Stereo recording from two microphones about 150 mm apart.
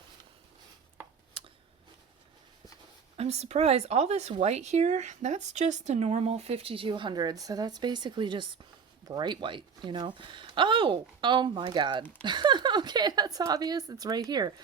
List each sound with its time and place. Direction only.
3.2 s a woman's voice: 45° right (ahead or behind); by 14.5 s 25° right (ahead or behind)